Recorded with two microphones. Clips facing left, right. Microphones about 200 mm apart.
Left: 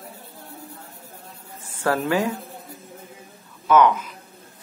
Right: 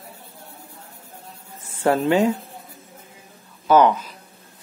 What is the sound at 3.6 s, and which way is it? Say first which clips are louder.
Speech: right 1 dB; 30° right (ahead or behind).